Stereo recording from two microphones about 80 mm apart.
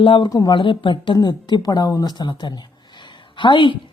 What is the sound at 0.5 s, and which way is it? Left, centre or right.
Speech, left.